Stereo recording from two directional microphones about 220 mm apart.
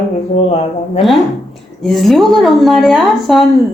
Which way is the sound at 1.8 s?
Centre (ahead or behind).